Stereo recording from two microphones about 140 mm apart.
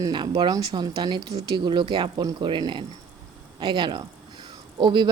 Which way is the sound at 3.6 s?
35° right (ahead or behind).